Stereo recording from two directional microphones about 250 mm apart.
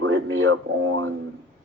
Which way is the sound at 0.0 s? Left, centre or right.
Right.